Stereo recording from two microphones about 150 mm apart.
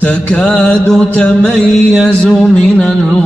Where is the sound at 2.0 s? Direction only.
5° left (ahead or behind).